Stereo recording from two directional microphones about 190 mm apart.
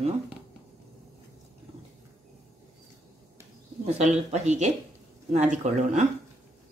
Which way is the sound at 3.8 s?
35° right (ahead or behind).